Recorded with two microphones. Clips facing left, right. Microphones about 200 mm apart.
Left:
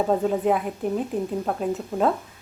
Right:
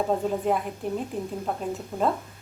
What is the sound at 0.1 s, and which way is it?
Speech, 5° left (ahead or behind).